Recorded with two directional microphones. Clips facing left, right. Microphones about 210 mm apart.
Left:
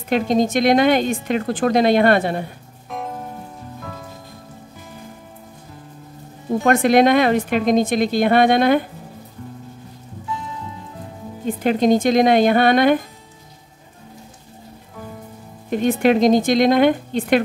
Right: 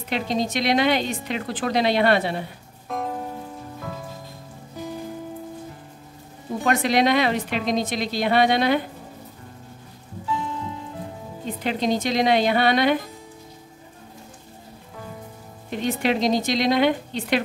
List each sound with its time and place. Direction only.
0.1 s a woman's voice: 50° left (ahead or behind)
6.6 s a woman's voice: 50° left (ahead or behind)
11.4 s a woman's voice: 50° left (ahead or behind)
15.7 s a woman's voice: 50° left (ahead or behind)